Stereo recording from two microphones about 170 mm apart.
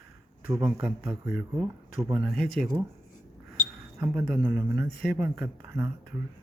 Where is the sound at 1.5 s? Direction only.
30° right (ahead or behind).